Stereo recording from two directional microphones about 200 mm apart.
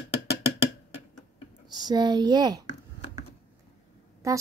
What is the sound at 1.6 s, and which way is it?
Speech, 20° right (ahead or behind).